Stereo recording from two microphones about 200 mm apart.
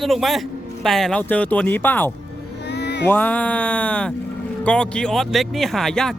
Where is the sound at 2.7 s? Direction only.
55° left (ahead or behind).